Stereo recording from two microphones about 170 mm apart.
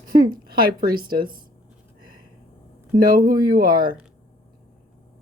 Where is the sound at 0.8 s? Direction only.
60° right (ahead or behind).